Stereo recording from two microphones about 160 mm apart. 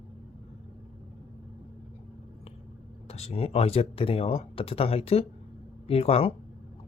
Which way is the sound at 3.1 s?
40° left (ahead or behind).